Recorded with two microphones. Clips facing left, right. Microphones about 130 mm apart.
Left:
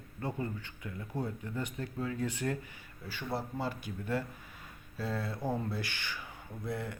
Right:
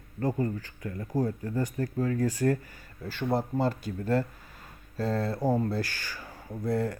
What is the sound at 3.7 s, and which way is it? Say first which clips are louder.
Speech: right 7 dB; 15° left (ahead or behind).